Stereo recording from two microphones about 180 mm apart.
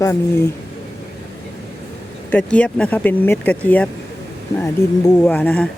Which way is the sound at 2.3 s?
5° left (ahead or behind).